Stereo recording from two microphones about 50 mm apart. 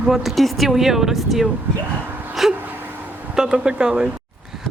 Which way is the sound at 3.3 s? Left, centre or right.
Centre.